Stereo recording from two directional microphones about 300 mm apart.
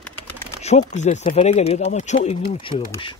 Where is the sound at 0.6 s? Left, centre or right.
Left.